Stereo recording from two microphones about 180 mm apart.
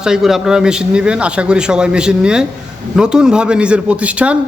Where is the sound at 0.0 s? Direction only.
Centre (ahead or behind).